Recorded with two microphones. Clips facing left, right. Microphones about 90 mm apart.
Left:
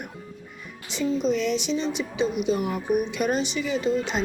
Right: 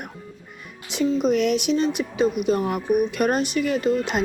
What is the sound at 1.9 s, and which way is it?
Speech, 50° right (ahead or behind).